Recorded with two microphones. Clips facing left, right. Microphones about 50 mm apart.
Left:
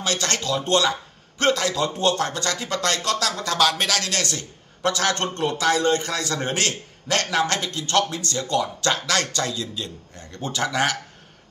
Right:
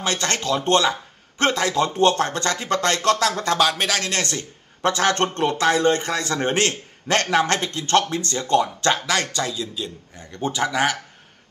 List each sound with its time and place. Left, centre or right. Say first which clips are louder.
0.0 s a man's voice: right 1 dB; right
3.5 s a man's voice: right 1 dB; centre
4.1 s a man's voice: right 2 dB; right
5.1 s a man's voice: right 3 dB; right
8.9 s a man's voice: right 1 dB; centre